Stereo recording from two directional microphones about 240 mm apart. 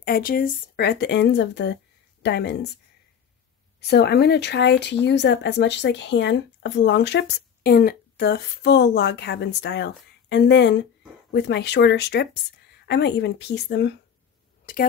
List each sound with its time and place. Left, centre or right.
0.0 s speech: left
3.8 s speech: left